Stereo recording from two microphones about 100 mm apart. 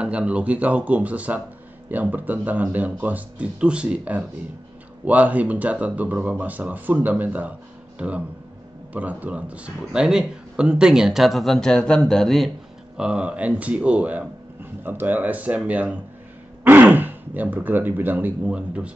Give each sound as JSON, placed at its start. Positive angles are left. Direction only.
{"t": 0.0, "sound": "speech", "side_deg": -10}
{"t": 8.9, "sound": "speech", "side_deg": -15}
{"t": 12.9, "sound": "speech", "side_deg": -10}